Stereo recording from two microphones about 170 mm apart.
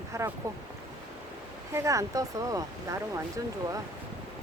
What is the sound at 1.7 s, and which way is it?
Speech, 20° right (ahead or behind).